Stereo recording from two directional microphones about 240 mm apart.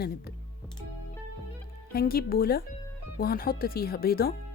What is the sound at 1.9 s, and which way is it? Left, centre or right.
Speech, left.